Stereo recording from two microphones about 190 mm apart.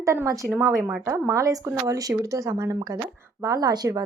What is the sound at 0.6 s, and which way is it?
Speech, centre (ahead or behind).